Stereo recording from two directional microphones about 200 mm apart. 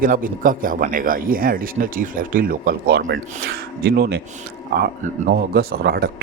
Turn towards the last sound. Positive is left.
turn(degrees=-50)  # may be behind; listen again after turning